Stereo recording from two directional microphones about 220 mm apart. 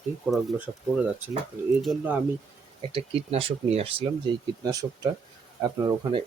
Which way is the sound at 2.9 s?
25° right (ahead or behind).